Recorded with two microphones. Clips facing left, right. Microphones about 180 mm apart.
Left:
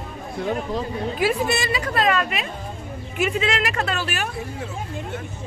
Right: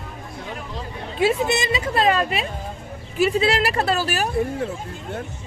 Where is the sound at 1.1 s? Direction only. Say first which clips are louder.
Right 3 dB; 25° right (ahead or behind).